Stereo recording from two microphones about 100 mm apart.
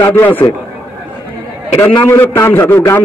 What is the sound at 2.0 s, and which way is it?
A man's voice, 25° left (ahead or behind).